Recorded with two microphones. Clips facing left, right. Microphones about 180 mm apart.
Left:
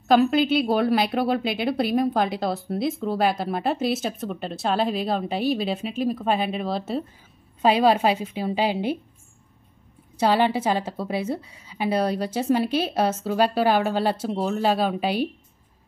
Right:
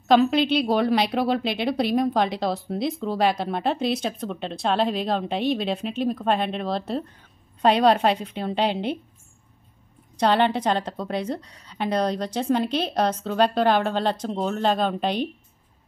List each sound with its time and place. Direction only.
0.1 s a woman's voice: centre (ahead or behind)
10.1 s a woman's voice: 5° left (ahead or behind)